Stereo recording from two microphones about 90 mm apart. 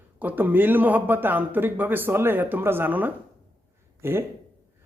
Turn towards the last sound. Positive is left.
turn(degrees=-30)  # may be behind; listen again after turning